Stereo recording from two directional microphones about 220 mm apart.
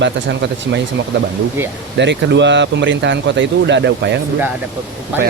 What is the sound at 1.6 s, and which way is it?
Speech, 10° right (ahead or behind).